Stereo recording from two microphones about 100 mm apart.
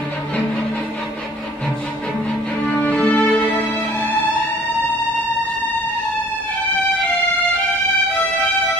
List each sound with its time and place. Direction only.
2.6 s music: 15° left (ahead or behind)